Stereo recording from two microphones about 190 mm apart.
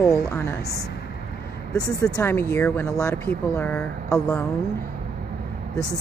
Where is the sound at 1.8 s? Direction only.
15° left (ahead or behind).